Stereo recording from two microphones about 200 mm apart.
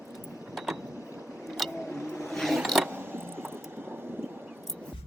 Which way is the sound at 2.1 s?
Centre (ahead or behind).